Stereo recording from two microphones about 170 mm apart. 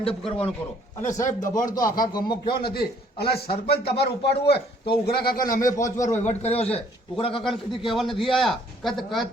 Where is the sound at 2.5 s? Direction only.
65° left (ahead or behind).